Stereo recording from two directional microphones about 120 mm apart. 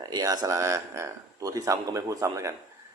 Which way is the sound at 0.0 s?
35° right (ahead or behind).